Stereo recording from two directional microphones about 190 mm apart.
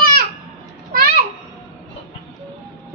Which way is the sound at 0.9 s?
50° right (ahead or behind).